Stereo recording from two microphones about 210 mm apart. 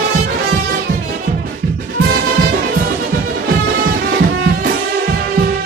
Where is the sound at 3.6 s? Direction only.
50° right (ahead or behind).